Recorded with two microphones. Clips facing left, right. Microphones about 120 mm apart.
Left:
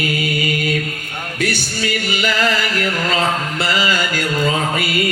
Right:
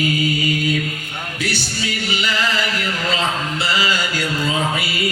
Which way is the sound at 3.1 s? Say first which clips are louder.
Left 3 dB; 50° left (ahead or behind).